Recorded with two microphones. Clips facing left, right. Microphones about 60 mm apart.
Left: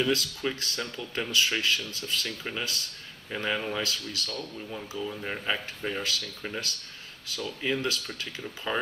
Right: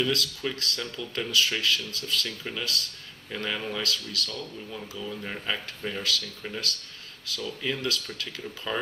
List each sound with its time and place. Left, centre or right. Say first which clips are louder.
0.0 s speech: left 1 dB; left
2.2 s speech: even; centre
2.6 s speech: right 1 dB; left
5.0 s speech: left 1 dB; centre
7.3 s speech: left 1 dB; left